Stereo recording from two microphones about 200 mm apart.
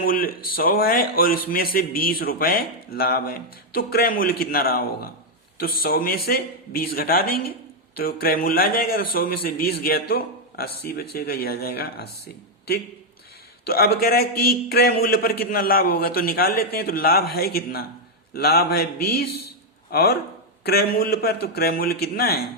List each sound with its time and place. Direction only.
0.0 s a man's voice: 45° left (ahead or behind)
13.7 s a man's voice: 50° left (ahead or behind)